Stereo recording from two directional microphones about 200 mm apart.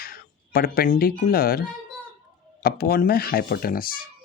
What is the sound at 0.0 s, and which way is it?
Speech, 50° left (ahead or behind).